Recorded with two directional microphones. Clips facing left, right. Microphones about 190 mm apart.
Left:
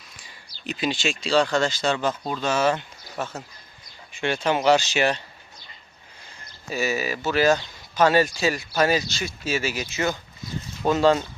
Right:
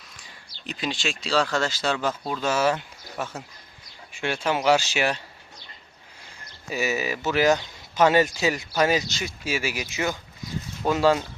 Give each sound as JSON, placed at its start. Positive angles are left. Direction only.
{"t": 0.7, "sound": "speech", "side_deg": 5}
{"t": 6.7, "sound": "speech", "side_deg": -15}